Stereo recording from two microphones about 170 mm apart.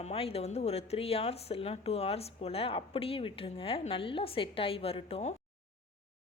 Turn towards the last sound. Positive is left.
turn(degrees=35)  # may be behind; listen again after turning